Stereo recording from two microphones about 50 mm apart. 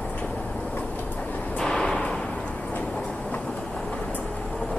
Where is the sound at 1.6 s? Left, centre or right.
Centre.